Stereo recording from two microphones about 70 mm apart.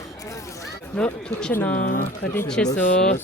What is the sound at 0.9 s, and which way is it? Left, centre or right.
Speech, centre.